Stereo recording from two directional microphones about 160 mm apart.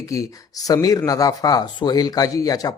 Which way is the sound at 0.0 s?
20° left (ahead or behind).